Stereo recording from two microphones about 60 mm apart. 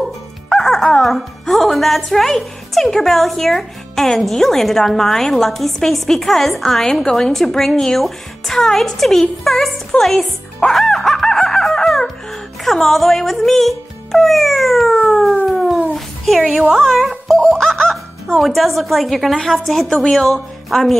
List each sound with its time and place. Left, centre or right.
0.5 s speech: centre
9.4 s music: centre
12.6 s speech: centre
15.0 s a sound: centre
15.5 s dog: centre
16.8 s speech: centre